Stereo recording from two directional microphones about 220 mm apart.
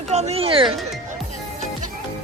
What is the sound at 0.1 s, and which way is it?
Speech, 30° right (ahead or behind).